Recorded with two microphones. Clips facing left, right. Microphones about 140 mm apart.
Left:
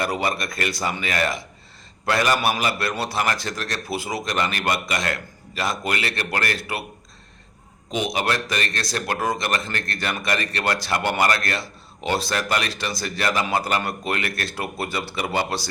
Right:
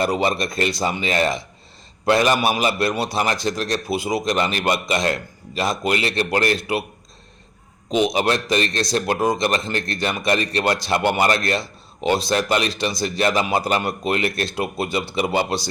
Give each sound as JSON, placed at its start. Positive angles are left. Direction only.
{"t": 0.0, "sound": "a man's voice", "side_deg": -25}
{"t": 7.9, "sound": "a man's voice", "side_deg": -20}